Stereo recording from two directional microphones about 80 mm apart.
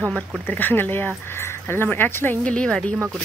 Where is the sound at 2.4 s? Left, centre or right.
Centre.